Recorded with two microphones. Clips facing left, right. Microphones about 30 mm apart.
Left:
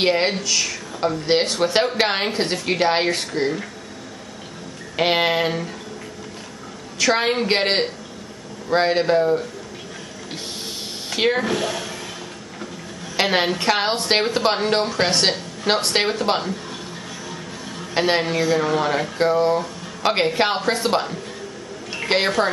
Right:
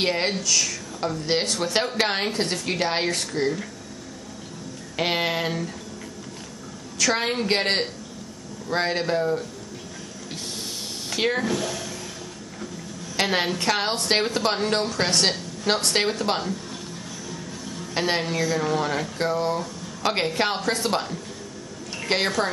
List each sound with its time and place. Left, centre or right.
0.0 s speech: centre
4.9 s speech: left
7.0 s speech: centre
11.1 s speech: left
13.1 s a man's voice: centre